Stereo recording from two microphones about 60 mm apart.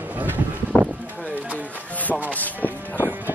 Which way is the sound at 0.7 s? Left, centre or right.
Centre.